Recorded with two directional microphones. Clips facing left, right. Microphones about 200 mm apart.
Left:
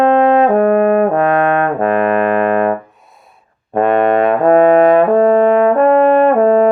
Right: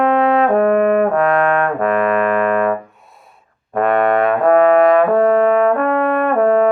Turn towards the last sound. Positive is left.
turn(degrees=25)  # may be behind; listen again after turning